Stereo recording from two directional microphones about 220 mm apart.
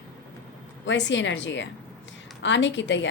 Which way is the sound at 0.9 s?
55° left (ahead or behind).